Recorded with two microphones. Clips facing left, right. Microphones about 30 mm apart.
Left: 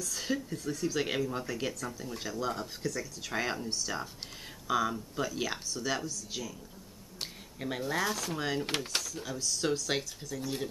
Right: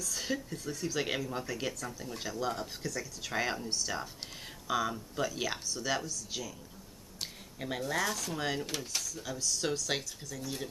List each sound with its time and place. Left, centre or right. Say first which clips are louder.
0.0 s speech: left 1 dB; centre
7.5 s speech: left 1 dB; centre
8.6 s speech: left 4 dB; left
9.0 s speech: left 1 dB; centre